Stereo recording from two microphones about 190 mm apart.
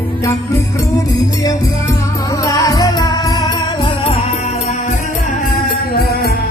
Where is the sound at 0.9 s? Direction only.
20° left (ahead or behind).